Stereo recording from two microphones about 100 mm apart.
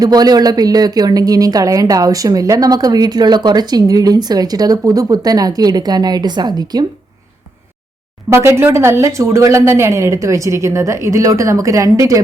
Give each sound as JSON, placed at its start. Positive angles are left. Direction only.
{"t": 0.0, "sound": "speech", "side_deg": -40}
{"t": 8.3, "sound": "speech", "side_deg": -25}